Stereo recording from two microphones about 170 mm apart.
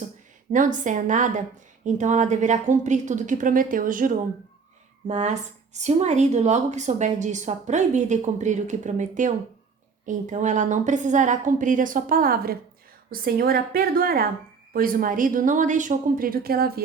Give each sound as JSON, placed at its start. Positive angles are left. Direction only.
{"t": 0.5, "sound": "a woman's voice", "side_deg": -50}